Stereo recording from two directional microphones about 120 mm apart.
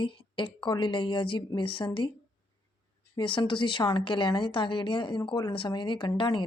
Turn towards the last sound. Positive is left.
turn(degrees=40)  # may be behind; listen again after turning